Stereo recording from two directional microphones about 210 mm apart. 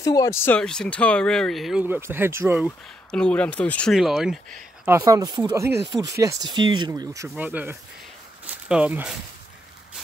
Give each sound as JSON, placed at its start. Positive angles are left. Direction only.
{"t": 0.0, "sound": "speech", "side_deg": 15}
{"t": 2.6, "sound": "speech", "side_deg": 5}
{"t": 4.8, "sound": "speech", "side_deg": -15}